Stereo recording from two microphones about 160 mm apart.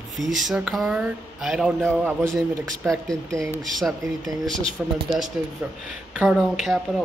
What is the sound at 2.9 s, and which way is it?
Speech, 5° left (ahead or behind).